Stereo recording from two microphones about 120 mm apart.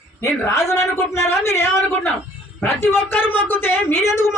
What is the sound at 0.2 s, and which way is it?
Speech, 25° left (ahead or behind).